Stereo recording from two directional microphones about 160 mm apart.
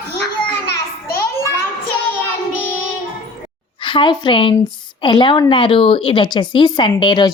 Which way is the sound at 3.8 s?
30° left (ahead or behind).